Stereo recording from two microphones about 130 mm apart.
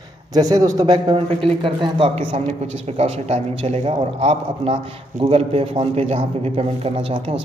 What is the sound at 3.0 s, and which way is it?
A man's voice, 55° right (ahead or behind).